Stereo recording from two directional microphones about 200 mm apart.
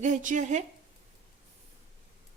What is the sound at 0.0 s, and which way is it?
Speech, 40° right (ahead or behind).